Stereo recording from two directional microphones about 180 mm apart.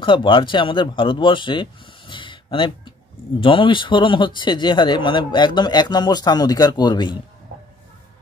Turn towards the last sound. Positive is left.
turn(degrees=25)  # may be behind; listen again after turning